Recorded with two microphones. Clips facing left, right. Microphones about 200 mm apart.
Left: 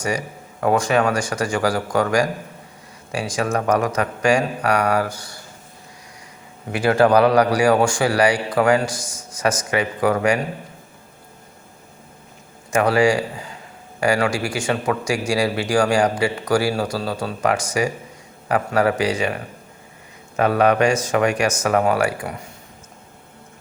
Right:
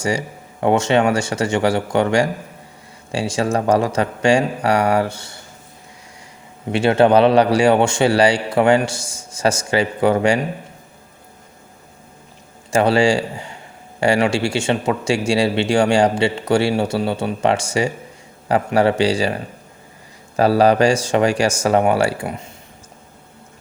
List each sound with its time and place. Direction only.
0.0 s speech: 25° right (ahead or behind)
6.7 s speech: 25° right (ahead or behind)
12.7 s speech: 30° right (ahead or behind)